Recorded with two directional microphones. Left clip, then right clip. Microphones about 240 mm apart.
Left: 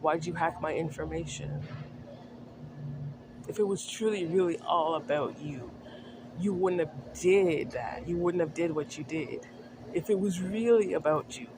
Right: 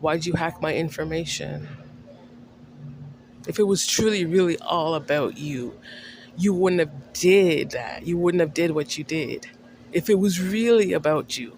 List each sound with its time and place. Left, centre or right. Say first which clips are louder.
0.0 s a man's voice: right 5 dB; right
3.4 s a man's voice: right 9 dB; right
6.4 s a man's voice: right 8 dB; right
9.9 s speech: right 8 dB; right